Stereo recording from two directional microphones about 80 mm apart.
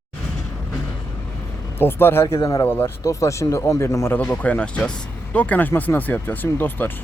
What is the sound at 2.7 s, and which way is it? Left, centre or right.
Speech, left.